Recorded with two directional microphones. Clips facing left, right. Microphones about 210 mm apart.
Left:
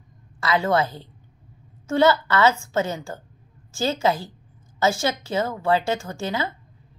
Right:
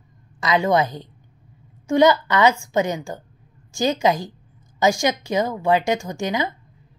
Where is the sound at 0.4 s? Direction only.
15° right (ahead or behind).